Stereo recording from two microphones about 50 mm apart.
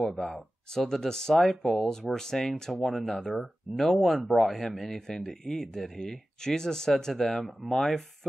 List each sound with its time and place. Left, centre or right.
0.0 s speech: centre